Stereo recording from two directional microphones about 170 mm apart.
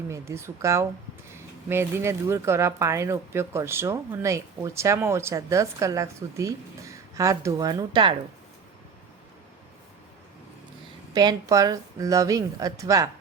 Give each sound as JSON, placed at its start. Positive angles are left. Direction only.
{"t": 0.1, "sound": "speech", "side_deg": -15}
{"t": 11.1, "sound": "speech", "side_deg": -25}